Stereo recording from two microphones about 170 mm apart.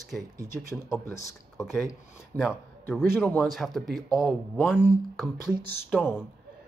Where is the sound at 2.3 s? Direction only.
20° right (ahead or behind).